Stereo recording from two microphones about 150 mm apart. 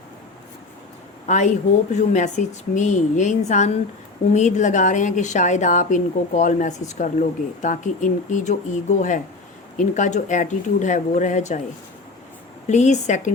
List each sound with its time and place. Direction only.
1.3 s a woman's voice: 55° left (ahead or behind)
12.6 s speech: 50° left (ahead or behind)